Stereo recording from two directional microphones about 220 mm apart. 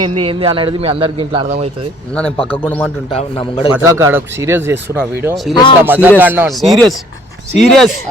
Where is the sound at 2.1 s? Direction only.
5° left (ahead or behind).